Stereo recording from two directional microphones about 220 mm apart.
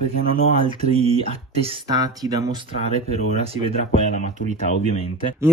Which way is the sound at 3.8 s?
35° left (ahead or behind).